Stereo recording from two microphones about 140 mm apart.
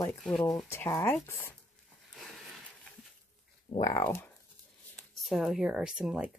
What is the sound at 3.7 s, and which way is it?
Speech, 20° left (ahead or behind).